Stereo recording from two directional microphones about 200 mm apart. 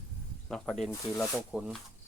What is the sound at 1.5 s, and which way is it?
Speech, 5° right (ahead or behind).